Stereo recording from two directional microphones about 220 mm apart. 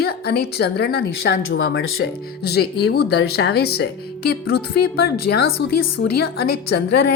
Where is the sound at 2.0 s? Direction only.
45° left (ahead or behind).